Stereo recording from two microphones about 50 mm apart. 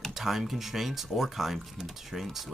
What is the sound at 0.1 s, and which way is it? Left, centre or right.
Speech, centre.